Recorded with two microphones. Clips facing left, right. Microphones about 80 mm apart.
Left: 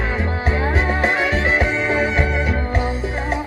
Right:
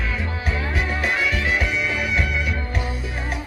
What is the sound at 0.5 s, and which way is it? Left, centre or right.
Music, left.